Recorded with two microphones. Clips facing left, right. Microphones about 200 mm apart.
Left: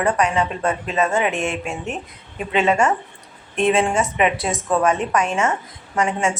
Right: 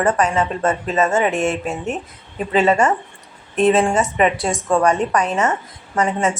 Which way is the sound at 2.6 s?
Centre (ahead or behind).